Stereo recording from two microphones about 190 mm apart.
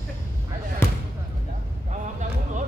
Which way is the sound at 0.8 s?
15° left (ahead or behind).